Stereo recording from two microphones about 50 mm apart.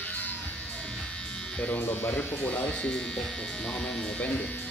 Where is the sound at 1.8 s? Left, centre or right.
Left.